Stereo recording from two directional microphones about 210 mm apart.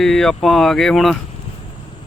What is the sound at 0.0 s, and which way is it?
Speech, centre (ahead or behind).